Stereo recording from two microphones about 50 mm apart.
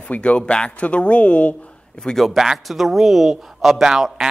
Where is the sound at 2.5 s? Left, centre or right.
Centre.